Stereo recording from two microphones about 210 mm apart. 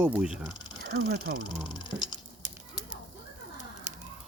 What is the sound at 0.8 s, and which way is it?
Speech, 50° right (ahead or behind).